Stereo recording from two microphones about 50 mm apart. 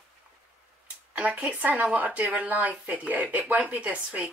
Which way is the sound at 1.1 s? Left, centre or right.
Right.